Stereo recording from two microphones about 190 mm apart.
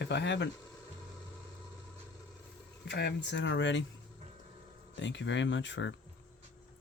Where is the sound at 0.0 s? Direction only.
65° left (ahead or behind).